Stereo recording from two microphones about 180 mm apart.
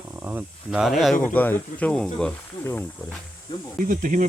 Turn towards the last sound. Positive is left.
turn(degrees=-45)  # may be behind; listen again after turning